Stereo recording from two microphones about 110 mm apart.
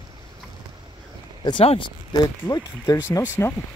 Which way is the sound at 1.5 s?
50° left (ahead or behind).